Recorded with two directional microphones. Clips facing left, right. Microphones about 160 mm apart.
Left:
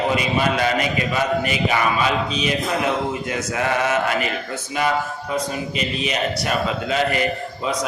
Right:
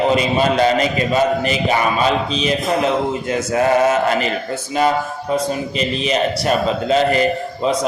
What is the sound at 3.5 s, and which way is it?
Speech, 30° right (ahead or behind).